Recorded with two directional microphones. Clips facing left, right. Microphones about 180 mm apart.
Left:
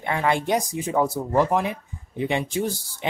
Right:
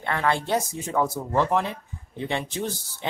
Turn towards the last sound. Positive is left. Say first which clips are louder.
# left 4 dB
turn(degrees=10)  # may be behind; listen again after turning